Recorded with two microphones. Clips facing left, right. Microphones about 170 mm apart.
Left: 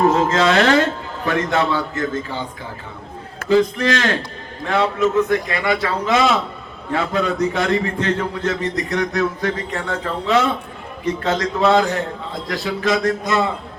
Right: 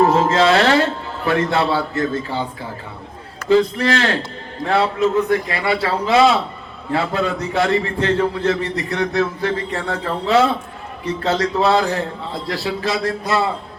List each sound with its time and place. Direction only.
0.1 s a man's voice: 35° right (ahead or behind)
3.6 s a man's voice: 35° right (ahead or behind)